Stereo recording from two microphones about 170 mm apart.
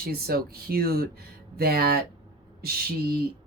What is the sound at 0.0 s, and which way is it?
Speech, 60° right (ahead or behind).